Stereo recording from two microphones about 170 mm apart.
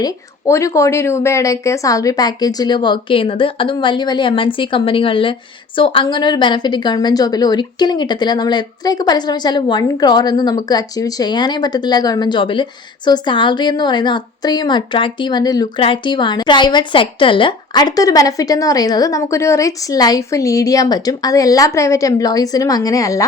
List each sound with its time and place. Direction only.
0.0 s speech: 20° left (ahead or behind)